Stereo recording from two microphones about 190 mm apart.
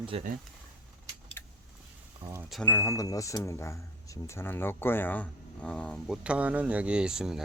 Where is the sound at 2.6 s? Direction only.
15° left (ahead or behind).